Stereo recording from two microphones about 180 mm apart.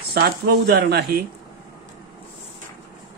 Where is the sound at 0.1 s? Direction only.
60° right (ahead or behind).